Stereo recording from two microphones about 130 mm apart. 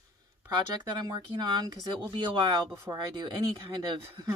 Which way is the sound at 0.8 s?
30° right (ahead or behind).